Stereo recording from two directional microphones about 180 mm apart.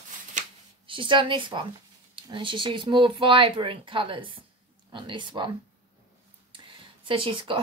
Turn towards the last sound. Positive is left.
turn(degrees=-30)  # may be behind; listen again after turning